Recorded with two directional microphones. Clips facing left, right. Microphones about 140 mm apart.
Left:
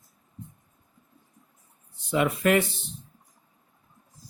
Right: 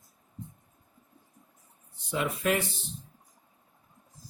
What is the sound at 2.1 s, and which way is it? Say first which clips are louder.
Speech: left 6 dB; 65° left (ahead or behind).